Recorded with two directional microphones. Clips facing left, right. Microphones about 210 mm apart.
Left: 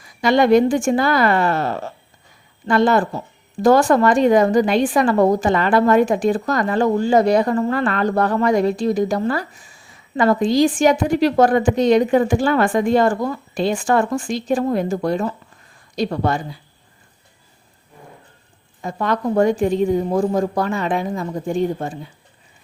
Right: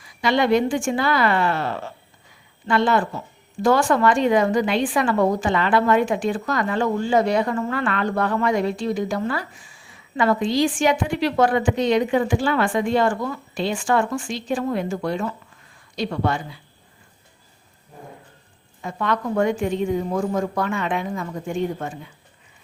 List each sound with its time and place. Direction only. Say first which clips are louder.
0.0 s a woman's voice: left 5 dB; 45° left (ahead or behind)
18.8 s speech: left 3 dB; 40° left (ahead or behind)